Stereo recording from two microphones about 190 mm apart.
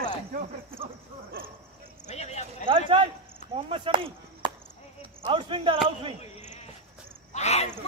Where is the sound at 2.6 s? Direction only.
30° right (ahead or behind).